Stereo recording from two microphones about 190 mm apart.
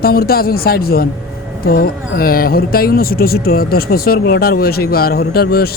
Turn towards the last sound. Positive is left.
turn(degrees=55)  # may be behind; listen again after turning